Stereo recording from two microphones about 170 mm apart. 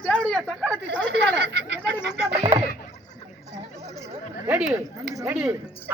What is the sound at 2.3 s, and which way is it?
Speech, 40° right (ahead or behind).